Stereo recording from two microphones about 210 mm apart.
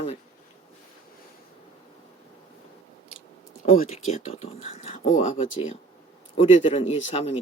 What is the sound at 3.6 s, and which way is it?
Speech, 30° left (ahead or behind).